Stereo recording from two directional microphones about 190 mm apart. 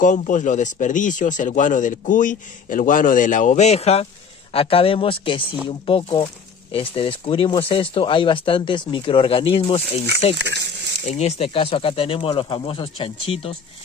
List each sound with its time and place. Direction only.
0.0 s speech: 40° left (ahead or behind)
10.4 s speech: 65° right (ahead or behind)
11.1 s speech: 35° left (ahead or behind)